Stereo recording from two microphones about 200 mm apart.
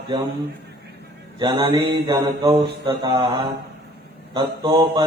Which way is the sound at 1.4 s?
25° right (ahead or behind).